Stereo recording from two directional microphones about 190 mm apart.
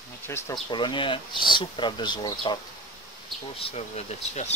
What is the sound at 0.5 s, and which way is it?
Speech, 25° left (ahead or behind).